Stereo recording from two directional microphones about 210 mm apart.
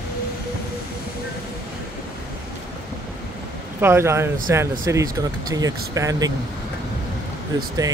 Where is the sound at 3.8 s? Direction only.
10° right (ahead or behind).